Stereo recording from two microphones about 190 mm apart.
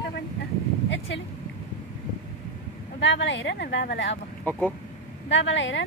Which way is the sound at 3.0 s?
70° left (ahead or behind).